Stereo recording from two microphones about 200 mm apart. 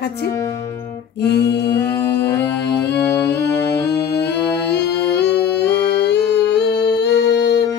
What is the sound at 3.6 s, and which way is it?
Music, 55° left (ahead or behind).